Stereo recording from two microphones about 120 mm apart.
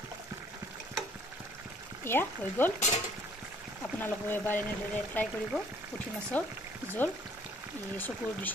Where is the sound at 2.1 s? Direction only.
20° left (ahead or behind).